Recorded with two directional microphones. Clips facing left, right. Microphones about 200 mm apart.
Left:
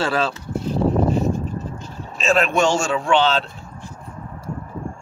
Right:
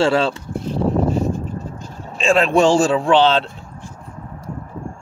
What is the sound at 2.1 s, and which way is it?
A man's voice, 30° right (ahead or behind).